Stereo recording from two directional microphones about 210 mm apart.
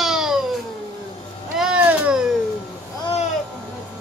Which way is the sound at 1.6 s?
5° right (ahead or behind).